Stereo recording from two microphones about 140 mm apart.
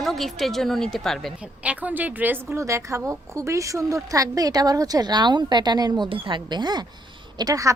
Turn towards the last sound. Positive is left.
turn(degrees=-25)  # may be behind; listen again after turning